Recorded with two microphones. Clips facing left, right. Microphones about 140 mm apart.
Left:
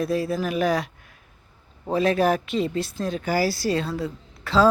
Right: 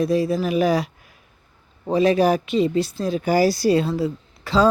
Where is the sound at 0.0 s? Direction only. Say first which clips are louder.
Right 4 dB; centre (ahead or behind).